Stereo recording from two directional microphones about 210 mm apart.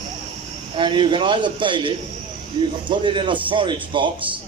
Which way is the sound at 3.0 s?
25° right (ahead or behind).